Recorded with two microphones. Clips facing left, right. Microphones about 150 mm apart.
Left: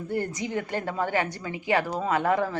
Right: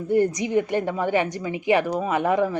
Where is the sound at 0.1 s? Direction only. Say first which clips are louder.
Right 9 dB; 15° right (ahead or behind).